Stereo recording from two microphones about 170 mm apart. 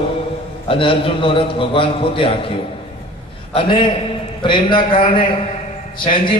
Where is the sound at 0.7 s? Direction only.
30° left (ahead or behind).